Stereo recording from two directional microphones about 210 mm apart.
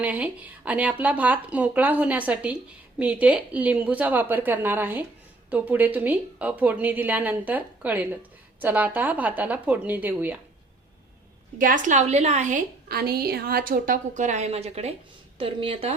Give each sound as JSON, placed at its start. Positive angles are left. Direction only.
{"t": 0.0, "sound": "a woman's voice", "side_deg": -5}
{"t": 11.5, "sound": "a woman's voice", "side_deg": -40}